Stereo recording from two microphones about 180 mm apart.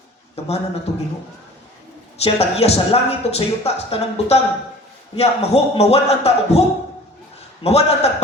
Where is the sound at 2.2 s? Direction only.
35° left (ahead or behind).